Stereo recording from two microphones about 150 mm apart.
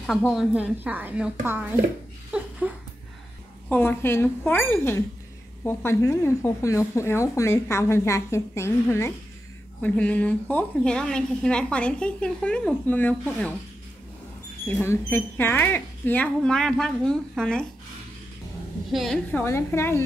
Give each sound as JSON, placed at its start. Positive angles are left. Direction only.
{"t": 0.3, "sound": "a woman's voice", "side_deg": -5}
{"t": 2.3, "sound": "a sound", "side_deg": -10}
{"t": 3.6, "sound": "a woman's voice", "side_deg": 15}
{"t": 14.8, "sound": "a woman's voice", "side_deg": 15}
{"t": 18.9, "sound": "a woman's voice", "side_deg": 0}
{"t": 19.3, "sound": "a woman's voice", "side_deg": 15}